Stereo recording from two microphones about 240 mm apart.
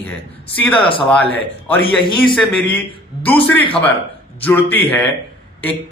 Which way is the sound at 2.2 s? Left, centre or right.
Centre.